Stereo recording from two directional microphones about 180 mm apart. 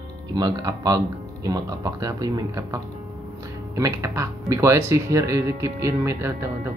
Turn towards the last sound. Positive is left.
turn(degrees=-15)  # may be behind; listen again after turning